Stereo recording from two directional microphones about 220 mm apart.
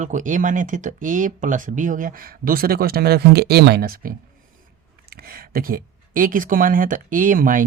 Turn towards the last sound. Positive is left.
turn(degrees=-40)  # may be behind; listen again after turning